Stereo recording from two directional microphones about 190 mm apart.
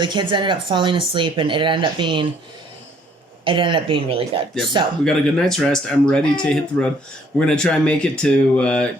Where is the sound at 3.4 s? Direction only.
25° right (ahead or behind).